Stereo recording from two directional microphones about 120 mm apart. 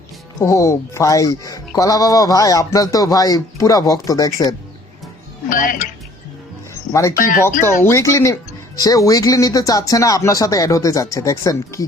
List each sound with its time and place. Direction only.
0.3 s speech: 25° left (ahead or behind)
5.5 s speech: 90° left
6.9 s speech: 25° left (ahead or behind)